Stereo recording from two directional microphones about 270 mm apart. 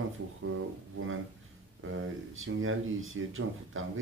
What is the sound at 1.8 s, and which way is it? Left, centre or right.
A man's voice, right.